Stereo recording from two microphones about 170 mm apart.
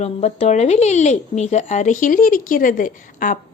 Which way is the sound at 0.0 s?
40° left (ahead or behind).